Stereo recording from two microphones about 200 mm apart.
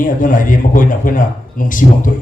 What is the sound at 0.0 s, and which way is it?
A man's voice, 40° left (ahead or behind).